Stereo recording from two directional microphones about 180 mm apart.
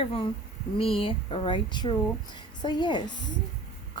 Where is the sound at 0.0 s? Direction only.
30° left (ahead or behind).